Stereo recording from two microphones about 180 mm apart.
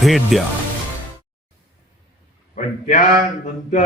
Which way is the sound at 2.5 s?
45° left (ahead or behind).